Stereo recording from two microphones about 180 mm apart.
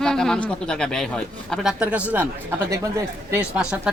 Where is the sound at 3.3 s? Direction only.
10° right (ahead or behind).